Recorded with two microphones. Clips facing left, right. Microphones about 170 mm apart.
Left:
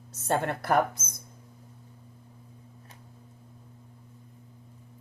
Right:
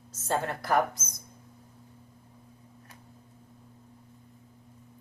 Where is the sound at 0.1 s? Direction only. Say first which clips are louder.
Left 2 dB; 65° left (ahead or behind).